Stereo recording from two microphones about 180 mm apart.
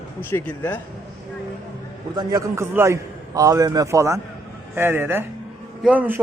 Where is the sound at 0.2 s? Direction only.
10° left (ahead or behind).